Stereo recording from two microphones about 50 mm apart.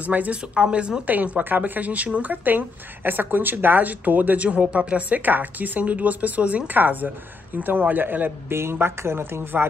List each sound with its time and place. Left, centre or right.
0.0 s speech: right
1.0 s speech: right
2.3 s speech: right
8.5 s a woman's voice: right